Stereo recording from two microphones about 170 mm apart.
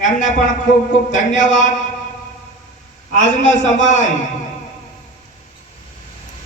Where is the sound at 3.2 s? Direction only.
45° left (ahead or behind).